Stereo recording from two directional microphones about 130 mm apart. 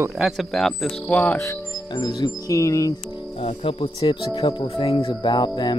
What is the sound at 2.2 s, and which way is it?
Speech, 25° left (ahead or behind).